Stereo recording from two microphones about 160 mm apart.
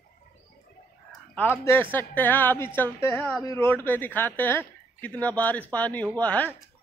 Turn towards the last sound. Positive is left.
turn(degrees=10)  # may be behind; listen again after turning